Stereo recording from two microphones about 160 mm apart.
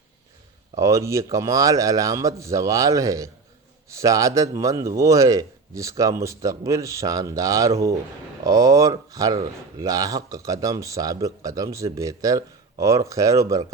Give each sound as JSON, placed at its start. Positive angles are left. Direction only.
{"t": 0.8, "sound": "speech", "side_deg": -20}